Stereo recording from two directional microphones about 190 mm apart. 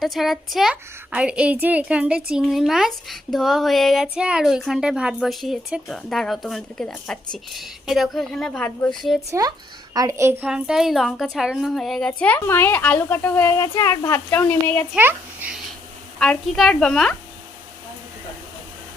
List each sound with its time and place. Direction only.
0.0 s speech: centre (ahead or behind)
9.9 s a child's voice: 15° right (ahead or behind)
10.5 s a woman's voice: 5° right (ahead or behind)
14.9 s a child's voice: 10° right (ahead or behind)
16.1 s speech: 5° left (ahead or behind)